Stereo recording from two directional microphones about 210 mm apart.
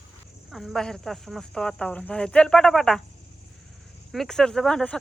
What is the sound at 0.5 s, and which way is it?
Speech, centre (ahead or behind).